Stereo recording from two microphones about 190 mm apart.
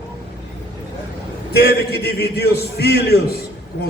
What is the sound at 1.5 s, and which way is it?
A man's voice, 55° left (ahead or behind).